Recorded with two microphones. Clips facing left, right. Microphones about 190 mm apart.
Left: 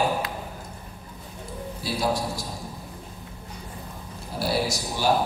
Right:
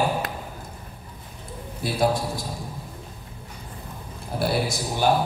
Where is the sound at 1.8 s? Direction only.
55° right (ahead or behind).